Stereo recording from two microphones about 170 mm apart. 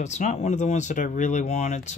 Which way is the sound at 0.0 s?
45° left (ahead or behind).